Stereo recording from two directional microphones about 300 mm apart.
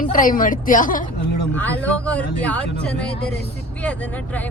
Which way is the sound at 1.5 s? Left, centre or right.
Centre.